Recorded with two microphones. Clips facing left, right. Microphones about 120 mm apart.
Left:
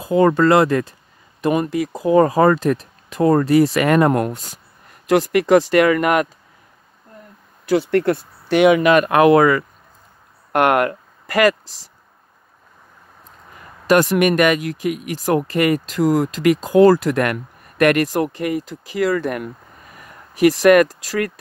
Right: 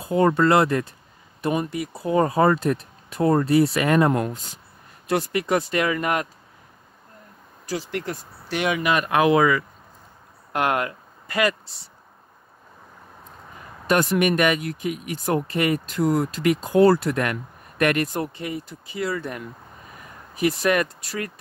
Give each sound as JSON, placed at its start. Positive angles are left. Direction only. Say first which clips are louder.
{"t": 0.0, "sound": "speech", "louder": "left 4 dB", "side_deg": 90}
{"t": 5.0, "sound": "speech", "louder": "left 8 dB", "side_deg": 90}
{"t": 7.6, "sound": "speech", "louder": "left 12 dB", "side_deg": 65}
{"t": 10.5, "sound": "speech", "louder": "left 7 dB", "side_deg": 65}
{"t": 13.8, "sound": "speech", "louder": "left 5 dB", "side_deg": 90}